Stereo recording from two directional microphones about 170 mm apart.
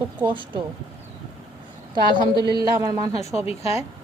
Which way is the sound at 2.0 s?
25° right (ahead or behind).